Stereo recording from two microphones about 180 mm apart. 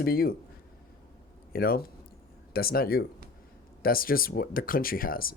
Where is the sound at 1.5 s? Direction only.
55° left (ahead or behind).